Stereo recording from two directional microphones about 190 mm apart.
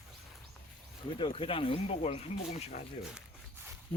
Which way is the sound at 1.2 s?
25° left (ahead or behind).